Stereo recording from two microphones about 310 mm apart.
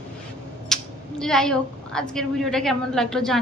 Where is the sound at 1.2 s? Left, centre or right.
Centre.